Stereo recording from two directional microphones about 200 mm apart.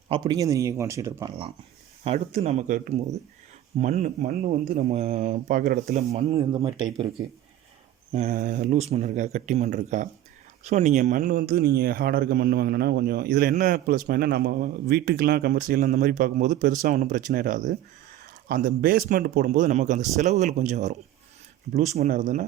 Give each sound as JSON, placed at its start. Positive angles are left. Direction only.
{"t": 0.1, "sound": "speech", "side_deg": -20}
{"t": 2.0, "sound": "speech", "side_deg": -30}
{"t": 8.1, "sound": "speech", "side_deg": -40}